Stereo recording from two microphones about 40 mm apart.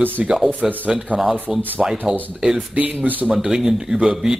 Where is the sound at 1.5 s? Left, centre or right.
Centre.